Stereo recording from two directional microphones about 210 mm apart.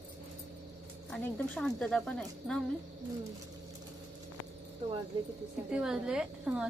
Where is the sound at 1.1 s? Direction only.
5° left (ahead or behind).